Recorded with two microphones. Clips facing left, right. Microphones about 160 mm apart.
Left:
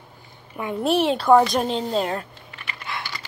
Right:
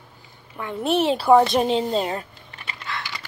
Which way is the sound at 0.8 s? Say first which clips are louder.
Even; centre (ahead or behind).